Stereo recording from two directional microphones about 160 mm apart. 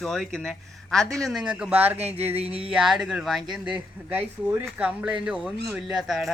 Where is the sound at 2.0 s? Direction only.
40° right (ahead or behind).